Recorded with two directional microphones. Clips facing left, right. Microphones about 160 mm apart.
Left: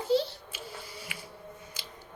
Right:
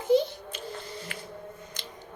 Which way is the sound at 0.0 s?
20° right (ahead or behind).